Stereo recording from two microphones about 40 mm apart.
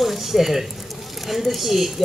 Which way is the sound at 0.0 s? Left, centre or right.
Centre.